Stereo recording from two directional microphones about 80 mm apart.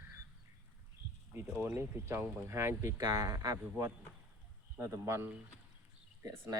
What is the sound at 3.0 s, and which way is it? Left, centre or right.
Speech, right.